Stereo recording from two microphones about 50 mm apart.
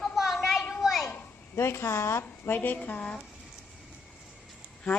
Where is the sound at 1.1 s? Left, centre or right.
Left.